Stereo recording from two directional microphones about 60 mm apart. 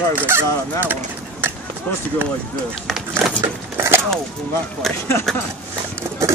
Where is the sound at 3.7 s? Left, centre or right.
Right.